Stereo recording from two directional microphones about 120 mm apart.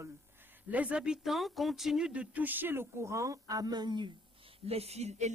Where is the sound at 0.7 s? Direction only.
10° right (ahead or behind); by 4.0 s 35° right (ahead or behind).